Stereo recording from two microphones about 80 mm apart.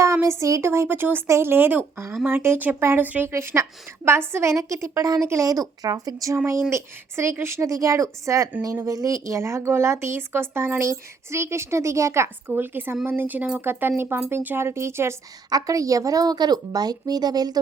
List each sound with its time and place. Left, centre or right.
0.0 s a woman's voice: right
3.3 s a woman's voice: right
6.3 s a woman's voice: right
12.5 s speech: right
15.4 s a woman's voice: right